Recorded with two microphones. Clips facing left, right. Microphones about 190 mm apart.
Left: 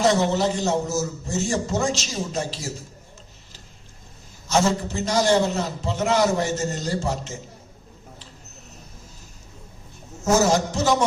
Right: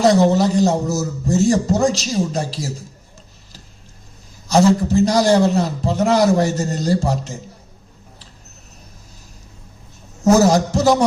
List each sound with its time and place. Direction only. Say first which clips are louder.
0.0 s a man's voice: right 6 dB; 35° right (ahead or behind)
4.4 s a man's voice: right 7 dB; 35° right (ahead or behind)
10.3 s a man's voice: right 4 dB; 35° right (ahead or behind)